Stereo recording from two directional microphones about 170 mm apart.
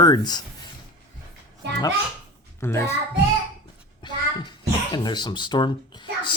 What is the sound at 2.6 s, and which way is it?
Speech, 15° left (ahead or behind).